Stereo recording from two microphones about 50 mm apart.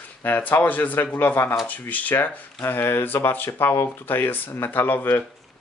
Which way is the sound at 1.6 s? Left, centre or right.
Left.